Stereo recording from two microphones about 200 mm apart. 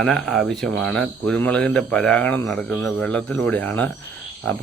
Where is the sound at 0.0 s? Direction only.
5° left (ahead or behind).